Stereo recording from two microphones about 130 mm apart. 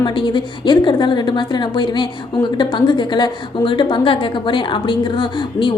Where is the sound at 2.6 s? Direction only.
35° left (ahead or behind).